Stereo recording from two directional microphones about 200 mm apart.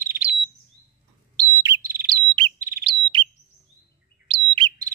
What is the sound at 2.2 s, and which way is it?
Chirp, 25° right (ahead or behind).